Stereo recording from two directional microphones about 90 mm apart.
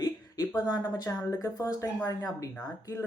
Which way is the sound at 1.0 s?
40° left (ahead or behind).